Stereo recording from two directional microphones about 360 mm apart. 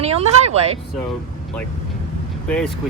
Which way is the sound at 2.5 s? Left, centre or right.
Centre.